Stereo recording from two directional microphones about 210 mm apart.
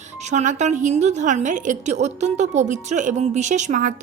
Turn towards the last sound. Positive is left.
turn(degrees=-35)  # may be behind; listen again after turning